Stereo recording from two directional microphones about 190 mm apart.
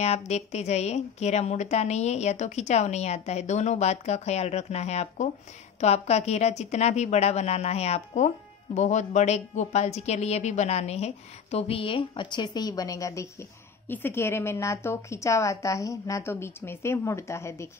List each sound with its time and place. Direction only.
0.0 s a woman's voice: 35° left (ahead or behind); by 17.6 s 15° left (ahead or behind)